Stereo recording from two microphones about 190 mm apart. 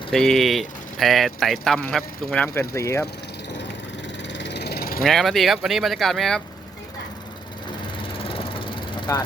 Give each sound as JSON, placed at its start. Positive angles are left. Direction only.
{"t": 0.1, "sound": "speech", "side_deg": 0}
{"t": 4.3, "sound": "vehicle", "side_deg": 65}
{"t": 5.0, "sound": "speech", "side_deg": 0}
{"t": 8.2, "sound": "vehicle", "side_deg": 30}